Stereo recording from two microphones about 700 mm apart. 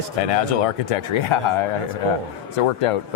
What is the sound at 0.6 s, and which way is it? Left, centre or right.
Speech, left.